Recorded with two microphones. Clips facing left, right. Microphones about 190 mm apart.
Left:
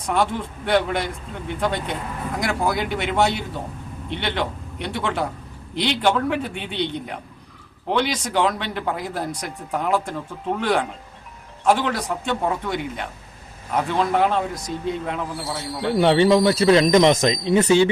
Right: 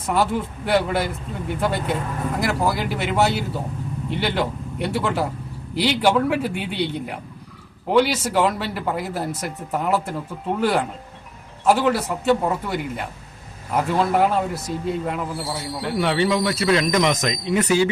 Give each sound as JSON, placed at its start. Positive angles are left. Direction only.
{"t": 0.1, "sound": "a man's voice", "side_deg": -5}
{"t": 16.0, "sound": "speech", "side_deg": 30}